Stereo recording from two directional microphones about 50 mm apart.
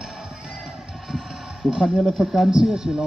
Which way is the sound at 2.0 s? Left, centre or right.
Centre.